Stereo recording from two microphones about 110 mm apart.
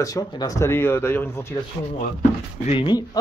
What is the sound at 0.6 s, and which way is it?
Speech, 20° left (ahead or behind).